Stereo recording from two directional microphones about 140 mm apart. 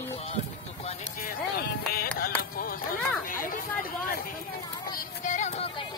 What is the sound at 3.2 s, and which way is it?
Speech, 80° left.